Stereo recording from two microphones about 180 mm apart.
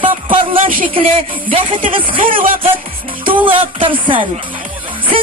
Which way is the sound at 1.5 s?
30° right (ahead or behind).